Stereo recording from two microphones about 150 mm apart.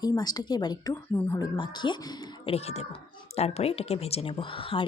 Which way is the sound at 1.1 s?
15° left (ahead or behind).